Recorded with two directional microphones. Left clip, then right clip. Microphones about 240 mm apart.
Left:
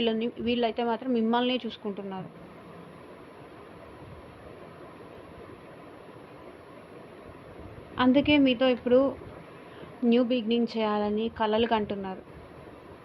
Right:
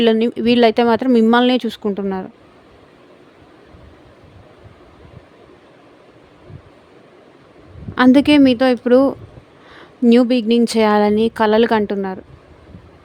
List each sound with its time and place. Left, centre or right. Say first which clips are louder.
0.0 s speech: right 13 dB; right
7.9 s speech: right 11 dB; right